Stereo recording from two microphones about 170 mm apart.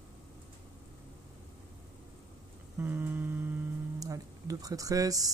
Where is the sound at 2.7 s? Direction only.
15° right (ahead or behind).